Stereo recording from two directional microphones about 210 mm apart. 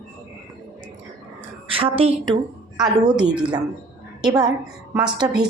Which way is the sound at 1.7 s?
25° right (ahead or behind).